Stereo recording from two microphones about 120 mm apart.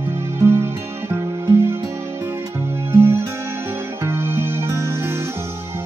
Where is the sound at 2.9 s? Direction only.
20° right (ahead or behind).